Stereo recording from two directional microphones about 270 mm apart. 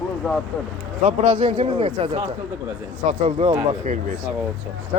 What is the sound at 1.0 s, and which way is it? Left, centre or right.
A man's voice, right.